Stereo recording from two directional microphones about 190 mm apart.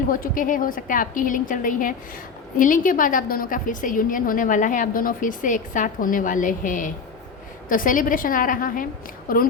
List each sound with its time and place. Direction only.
0.1 s a woman's voice: 45° left (ahead or behind)